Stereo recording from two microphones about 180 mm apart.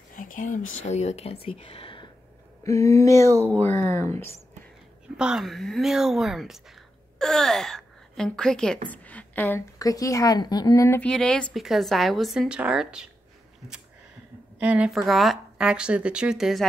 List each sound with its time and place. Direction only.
0.1 s speech: 50° left (ahead or behind)
0.8 s speech: 40° left (ahead or behind)
2.6 s speech: 15° left (ahead or behind)
5.0 s a woman's voice: 5° right (ahead or behind)
14.6 s a woman's voice: 5° right (ahead or behind)